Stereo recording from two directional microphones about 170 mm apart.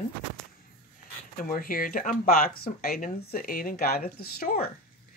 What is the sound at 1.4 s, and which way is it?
Speech, 55° left (ahead or behind).